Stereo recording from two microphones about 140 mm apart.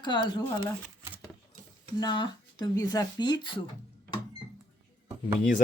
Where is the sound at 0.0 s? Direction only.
35° left (ahead or behind).